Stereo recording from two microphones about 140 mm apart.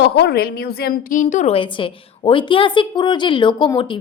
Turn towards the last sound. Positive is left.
turn(degrees=35)  # may be behind; listen again after turning